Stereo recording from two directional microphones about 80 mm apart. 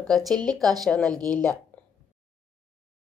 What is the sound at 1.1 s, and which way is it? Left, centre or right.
Speech, right.